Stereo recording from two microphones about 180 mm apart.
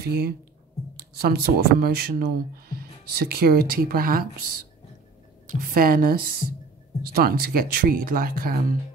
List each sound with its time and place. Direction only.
0.0 s speech: 60° right (ahead or behind)
5.5 s speech: 50° right (ahead or behind)